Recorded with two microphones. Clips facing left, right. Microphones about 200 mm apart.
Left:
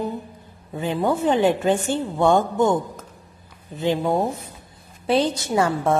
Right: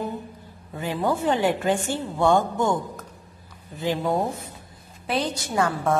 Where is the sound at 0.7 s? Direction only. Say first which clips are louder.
Left 3 dB; 20° left (ahead or behind).